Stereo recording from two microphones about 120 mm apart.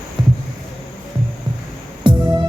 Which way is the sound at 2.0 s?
40° right (ahead or behind).